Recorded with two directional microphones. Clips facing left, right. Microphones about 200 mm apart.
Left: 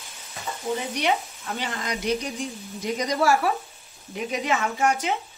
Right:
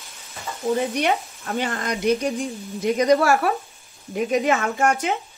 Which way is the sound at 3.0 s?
55° right (ahead or behind).